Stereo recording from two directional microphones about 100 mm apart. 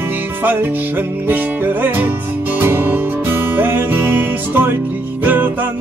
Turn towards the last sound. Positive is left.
turn(degrees=-20)  # may be behind; listen again after turning